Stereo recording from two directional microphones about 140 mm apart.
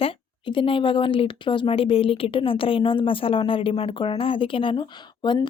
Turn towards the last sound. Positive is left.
turn(degrees=35)  # may be behind; listen again after turning